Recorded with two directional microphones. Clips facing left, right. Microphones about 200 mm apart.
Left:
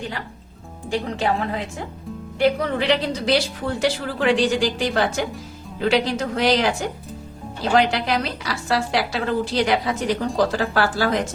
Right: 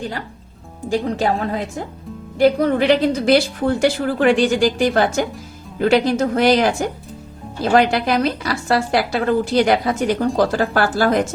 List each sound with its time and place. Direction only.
0.9 s a woman's voice: 40° right (ahead or behind)